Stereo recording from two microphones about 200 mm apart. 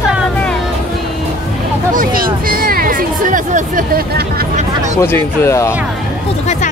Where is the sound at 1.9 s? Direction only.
45° right (ahead or behind).